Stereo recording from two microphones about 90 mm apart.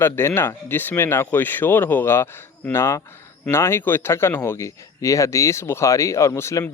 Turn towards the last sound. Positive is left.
turn(degrees=30)  # may be behind; listen again after turning